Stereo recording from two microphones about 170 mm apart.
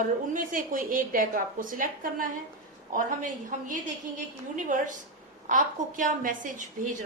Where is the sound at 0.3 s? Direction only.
55° right (ahead or behind).